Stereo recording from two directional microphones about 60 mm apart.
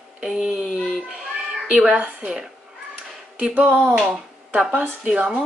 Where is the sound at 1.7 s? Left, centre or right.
Right.